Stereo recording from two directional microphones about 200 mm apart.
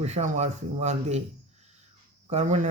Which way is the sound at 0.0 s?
35° right (ahead or behind).